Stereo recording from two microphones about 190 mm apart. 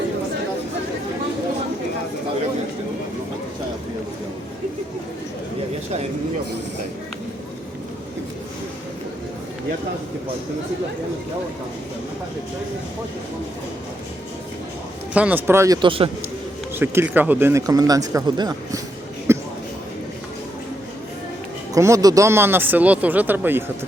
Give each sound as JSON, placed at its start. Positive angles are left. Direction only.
{"t": 15.1, "sound": "speech", "side_deg": -10}
{"t": 16.7, "sound": "speech", "side_deg": -10}
{"t": 19.3, "sound": "a sound", "side_deg": -15}
{"t": 21.8, "sound": "speech", "side_deg": -15}